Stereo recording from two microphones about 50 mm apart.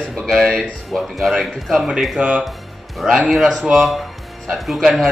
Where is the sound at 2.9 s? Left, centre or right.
Centre.